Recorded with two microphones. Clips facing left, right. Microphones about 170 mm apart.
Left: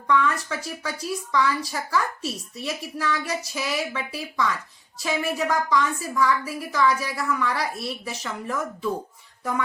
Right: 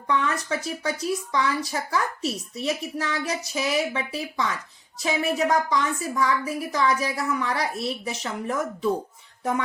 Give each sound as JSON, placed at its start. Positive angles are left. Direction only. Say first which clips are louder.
{"t": 0.1, "sound": "speech", "louder": "left 2 dB", "side_deg": -20}
{"t": 9.4, "sound": "music", "louder": "right 1 dB", "side_deg": -20}